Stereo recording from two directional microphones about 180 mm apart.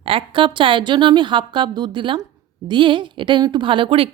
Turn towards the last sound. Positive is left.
turn(degrees=-30)  # may be behind; listen again after turning